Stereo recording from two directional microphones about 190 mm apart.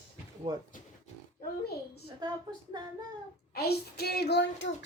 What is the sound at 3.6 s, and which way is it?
A child's voice, 55° left (ahead or behind).